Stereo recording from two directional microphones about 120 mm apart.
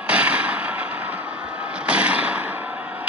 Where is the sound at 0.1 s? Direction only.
10° right (ahead or behind).